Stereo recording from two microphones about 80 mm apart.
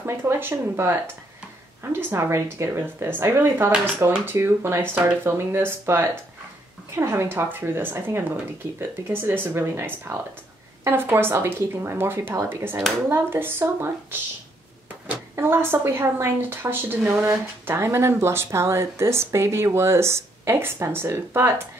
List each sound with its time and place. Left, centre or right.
0.0 s speech: right
15.3 s speech: right